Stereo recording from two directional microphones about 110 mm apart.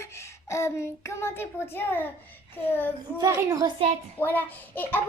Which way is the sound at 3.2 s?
25° right (ahead or behind).